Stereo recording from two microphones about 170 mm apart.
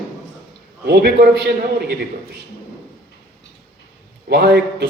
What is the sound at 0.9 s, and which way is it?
Speech, 70° right (ahead or behind).